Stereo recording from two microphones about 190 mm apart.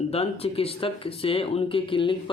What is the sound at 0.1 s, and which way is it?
Speech, 30° left (ahead or behind).